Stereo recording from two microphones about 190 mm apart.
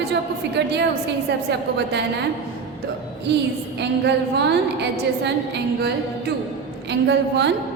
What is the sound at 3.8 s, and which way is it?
A woman's voice, 65° right (ahead or behind).